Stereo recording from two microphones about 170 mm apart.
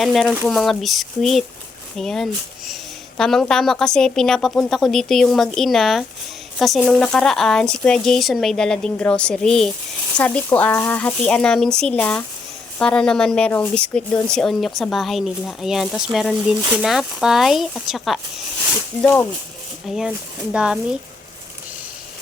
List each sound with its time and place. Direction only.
0.0 s speech: centre (ahead or behind)
19.0 s speech: 15° left (ahead or behind)
20.0 s speech: 5° right (ahead or behind)